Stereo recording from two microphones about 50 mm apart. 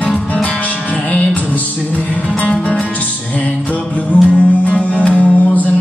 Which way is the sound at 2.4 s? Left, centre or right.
Left.